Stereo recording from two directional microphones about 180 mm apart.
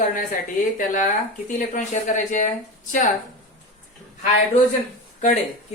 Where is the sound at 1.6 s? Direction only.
45° left (ahead or behind).